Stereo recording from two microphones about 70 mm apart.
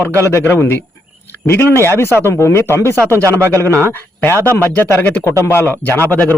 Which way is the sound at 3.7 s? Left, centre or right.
Right.